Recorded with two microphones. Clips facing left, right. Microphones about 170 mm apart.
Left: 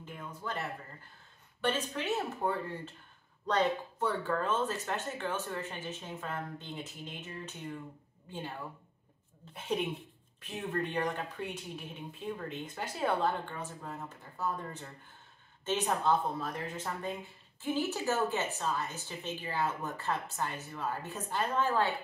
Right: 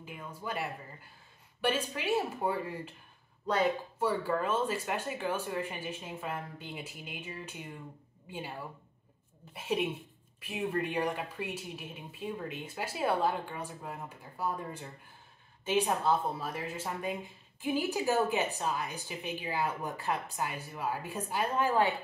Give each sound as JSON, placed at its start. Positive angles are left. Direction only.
{"t": 0.0, "sound": "speech", "side_deg": -10}